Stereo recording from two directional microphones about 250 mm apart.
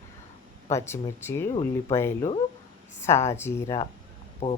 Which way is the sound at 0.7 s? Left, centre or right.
Centre.